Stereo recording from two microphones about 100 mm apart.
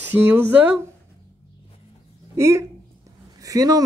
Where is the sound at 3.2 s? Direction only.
35° right (ahead or behind).